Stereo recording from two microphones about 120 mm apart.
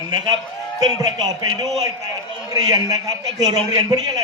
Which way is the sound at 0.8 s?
35° right (ahead or behind).